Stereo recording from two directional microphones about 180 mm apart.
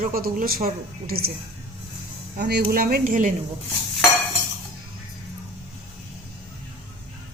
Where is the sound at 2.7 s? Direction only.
55° right (ahead or behind).